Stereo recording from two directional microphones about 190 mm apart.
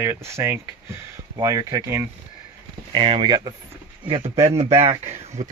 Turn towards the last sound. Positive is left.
turn(degrees=-35)  # may be behind; listen again after turning